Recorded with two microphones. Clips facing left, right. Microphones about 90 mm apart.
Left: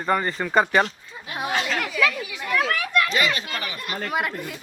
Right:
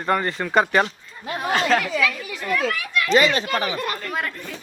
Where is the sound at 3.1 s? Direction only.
30° right (ahead or behind).